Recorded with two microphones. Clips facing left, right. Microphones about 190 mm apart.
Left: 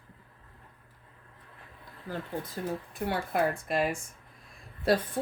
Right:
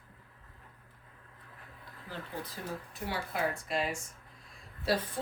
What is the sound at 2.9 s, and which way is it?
Speech, 55° left (ahead or behind).